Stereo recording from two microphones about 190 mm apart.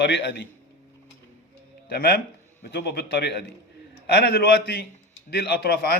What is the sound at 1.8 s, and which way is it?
A man's voice, 55° left (ahead or behind).